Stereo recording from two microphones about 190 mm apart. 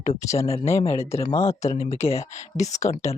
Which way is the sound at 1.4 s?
35° left (ahead or behind).